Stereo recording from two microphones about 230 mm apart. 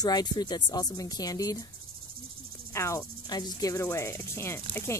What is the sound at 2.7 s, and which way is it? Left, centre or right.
Cricket, centre.